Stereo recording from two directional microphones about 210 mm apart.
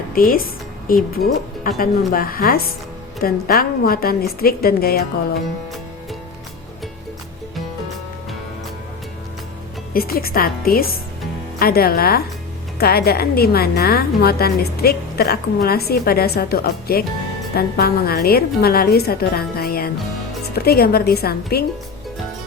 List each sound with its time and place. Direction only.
0.1 s a woman's voice: 45° left (ahead or behind)
9.9 s a woman's voice: 45° left (ahead or behind)